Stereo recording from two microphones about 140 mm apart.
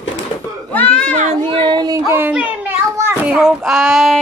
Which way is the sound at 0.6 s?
10° left (ahead or behind).